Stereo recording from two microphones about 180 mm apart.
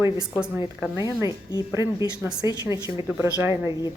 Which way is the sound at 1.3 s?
20° left (ahead or behind).